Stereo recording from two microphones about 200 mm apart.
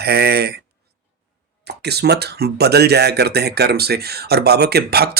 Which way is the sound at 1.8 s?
55° right (ahead or behind).